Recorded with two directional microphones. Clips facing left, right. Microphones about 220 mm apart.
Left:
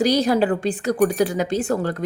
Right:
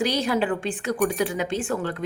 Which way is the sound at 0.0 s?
40° left (ahead or behind).